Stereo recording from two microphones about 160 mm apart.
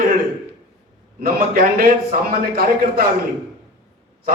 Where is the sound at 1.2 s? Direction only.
70° right (ahead or behind).